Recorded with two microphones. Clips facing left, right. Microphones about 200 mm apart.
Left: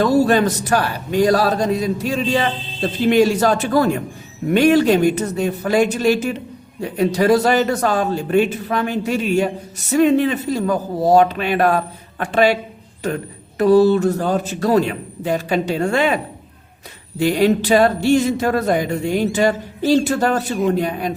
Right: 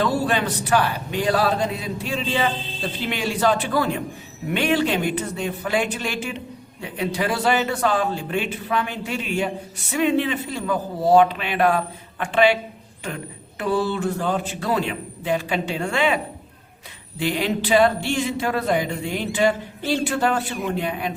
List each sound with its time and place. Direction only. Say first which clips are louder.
0.0 s a man's voice: left 7 dB; 40° left (ahead or behind)
13.6 s a man's voice: left 10 dB; 40° left (ahead or behind)